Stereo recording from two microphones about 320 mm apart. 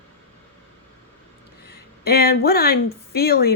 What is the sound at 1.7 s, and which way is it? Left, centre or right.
Speech, left.